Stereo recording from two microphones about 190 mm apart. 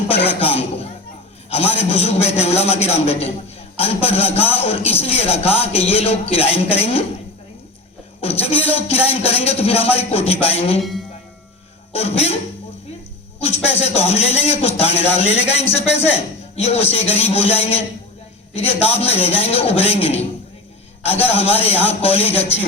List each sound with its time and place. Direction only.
0.3 s a man's voice: 30° left (ahead or behind)
8.2 s a man's voice: 30° left (ahead or behind)
11.9 s a man's voice: 35° left (ahead or behind)
13.4 s a man's voice: 35° left (ahead or behind)
21.2 s a man's voice: 30° left (ahead or behind)